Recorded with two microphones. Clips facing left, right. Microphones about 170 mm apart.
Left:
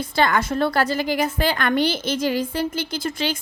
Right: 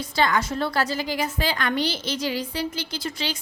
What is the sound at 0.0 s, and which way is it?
A woman's voice, 55° left (ahead or behind).